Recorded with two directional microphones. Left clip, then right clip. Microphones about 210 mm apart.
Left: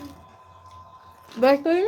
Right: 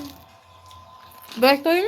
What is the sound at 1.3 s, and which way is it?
Speech, centre (ahead or behind).